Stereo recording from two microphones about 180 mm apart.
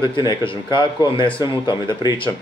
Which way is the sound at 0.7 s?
25° left (ahead or behind).